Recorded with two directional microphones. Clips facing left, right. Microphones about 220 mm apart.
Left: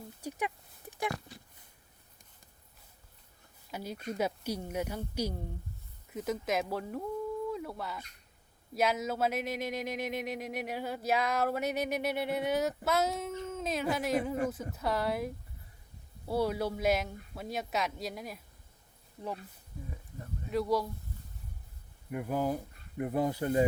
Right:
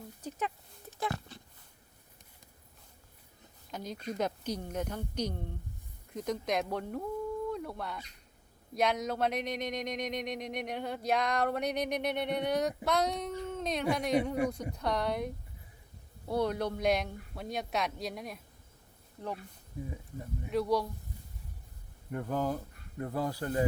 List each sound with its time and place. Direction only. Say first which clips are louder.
0.2 s a sound: left 1 dB; 10° left (ahead or behind)
3.7 s speech: even; 10° left (ahead or behind)
16.3 s speech: even; 5° left (ahead or behind)
20.5 s speech: even; centre (ahead or behind)
22.1 s speech: left 1 dB; 10° left (ahead or behind)